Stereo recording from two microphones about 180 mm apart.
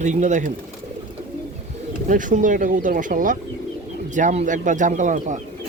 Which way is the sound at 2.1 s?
45° right (ahead or behind).